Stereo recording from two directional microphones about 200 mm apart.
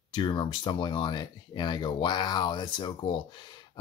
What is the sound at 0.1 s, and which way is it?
Speech, 25° left (ahead or behind).